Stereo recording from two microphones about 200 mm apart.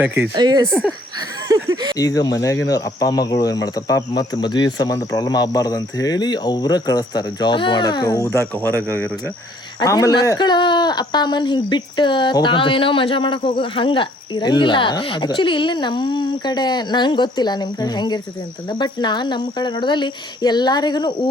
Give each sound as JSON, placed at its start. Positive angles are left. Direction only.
{"t": 0.3, "sound": "speech", "side_deg": -20}
{"t": 0.7, "sound": "speech", "side_deg": 5}
{"t": 1.5, "sound": "speech", "side_deg": -20}
{"t": 2.0, "sound": "speech", "side_deg": 20}